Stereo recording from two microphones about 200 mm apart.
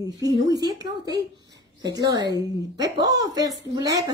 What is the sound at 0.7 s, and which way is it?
A woman's voice, 20° right (ahead or behind).